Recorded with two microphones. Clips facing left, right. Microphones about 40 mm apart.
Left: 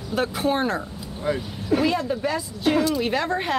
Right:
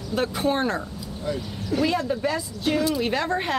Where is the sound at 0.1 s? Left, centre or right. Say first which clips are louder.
Left 1 dB; centre.